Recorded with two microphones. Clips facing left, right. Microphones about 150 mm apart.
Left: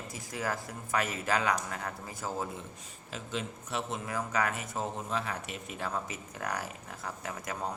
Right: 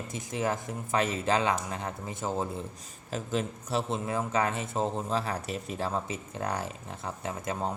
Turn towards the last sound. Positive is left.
turn(degrees=-25)  # may be behind; listen again after turning